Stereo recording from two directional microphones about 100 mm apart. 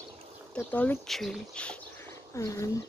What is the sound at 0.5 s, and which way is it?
Speech, 15° left (ahead or behind).